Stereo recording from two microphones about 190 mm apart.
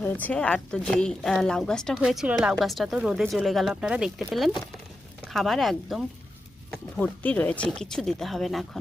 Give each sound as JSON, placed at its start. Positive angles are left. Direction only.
{"t": 0.0, "sound": "speech", "side_deg": 10}